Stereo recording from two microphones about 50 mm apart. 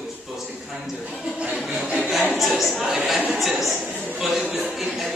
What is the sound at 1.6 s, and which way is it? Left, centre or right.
Speech, centre.